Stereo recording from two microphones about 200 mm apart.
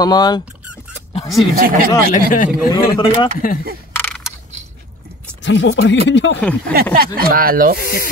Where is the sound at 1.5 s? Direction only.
45° right (ahead or behind).